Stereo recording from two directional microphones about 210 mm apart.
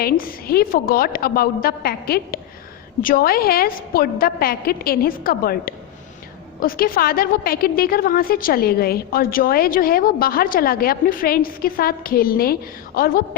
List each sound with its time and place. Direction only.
0.0 s a woman's voice: 45° left (ahead or behind)